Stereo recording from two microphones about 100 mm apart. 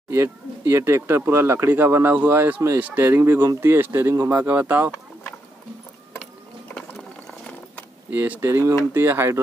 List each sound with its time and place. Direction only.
0.1 s speech: 25° right (ahead or behind)
6.7 s ratchet: 10° left (ahead or behind)
8.1 s speech: 20° right (ahead or behind)